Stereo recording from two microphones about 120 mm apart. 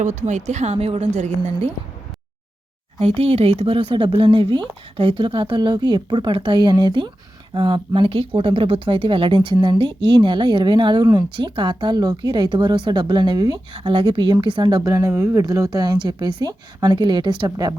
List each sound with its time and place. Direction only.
0.0 s a woman's voice: 90° right; by 1.7 s 75° right (ahead or behind)
3.0 s speech: 55° right (ahead or behind)
14.8 s speech: 25° right (ahead or behind)